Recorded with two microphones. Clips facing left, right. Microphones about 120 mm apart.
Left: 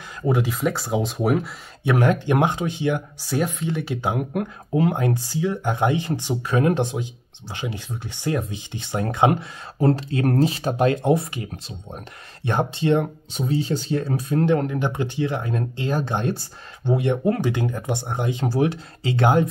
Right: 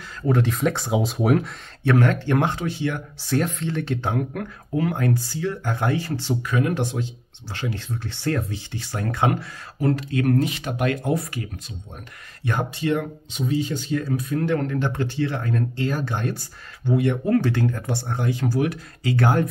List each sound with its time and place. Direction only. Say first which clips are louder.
0.3 s speech: right 1 dB; 5° left (ahead or behind)
1.8 s speech: even; 15° left (ahead or behind)
6.4 s speech: left 5 dB; 30° left (ahead or behind)
13.3 s speech: right 1 dB; 35° left (ahead or behind)
14.4 s speech: left 4 dB; 20° left (ahead or behind)